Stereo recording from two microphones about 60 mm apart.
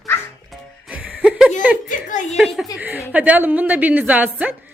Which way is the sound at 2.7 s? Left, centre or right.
Right.